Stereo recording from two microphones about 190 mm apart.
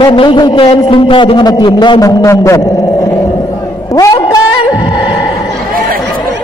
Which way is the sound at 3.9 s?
15° left (ahead or behind).